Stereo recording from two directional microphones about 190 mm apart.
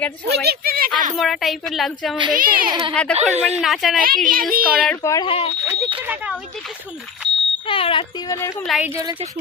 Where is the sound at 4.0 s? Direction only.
50° right (ahead or behind).